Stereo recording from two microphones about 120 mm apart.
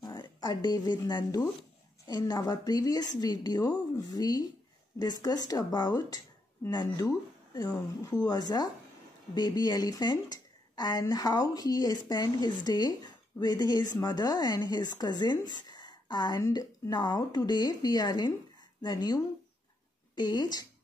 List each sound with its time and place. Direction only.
0.0 s a woman's voice: 35° left (ahead or behind)